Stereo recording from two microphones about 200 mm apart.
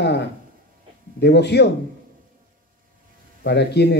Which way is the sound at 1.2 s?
55° left (ahead or behind).